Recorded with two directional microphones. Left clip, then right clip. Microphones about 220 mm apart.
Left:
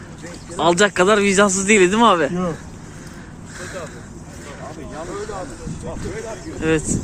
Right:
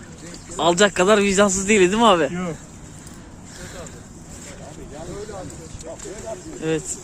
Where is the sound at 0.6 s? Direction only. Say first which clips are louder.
Left 2 dB; 25° right (ahead or behind).